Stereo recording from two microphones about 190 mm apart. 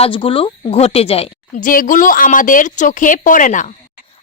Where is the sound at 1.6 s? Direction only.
45° left (ahead or behind).